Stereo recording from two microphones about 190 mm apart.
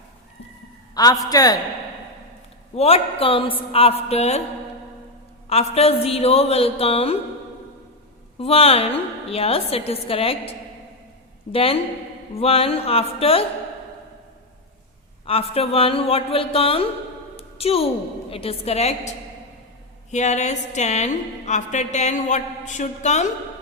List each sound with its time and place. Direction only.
0.9 s a woman's voice: 20° left (ahead or behind)
2.7 s a woman's voice: 30° left (ahead or behind)
5.5 s a woman's voice: 30° left (ahead or behind)
8.4 s a woman's voice: 30° left (ahead or behind)
11.5 s a woman's voice: 30° left (ahead or behind)
15.3 s speech: 30° left (ahead or behind)
17.3 s a sound: 30° left (ahead or behind)
18.3 s a woman's voice: 30° left (ahead or behind)
20.1 s a woman's voice: 35° left (ahead or behind)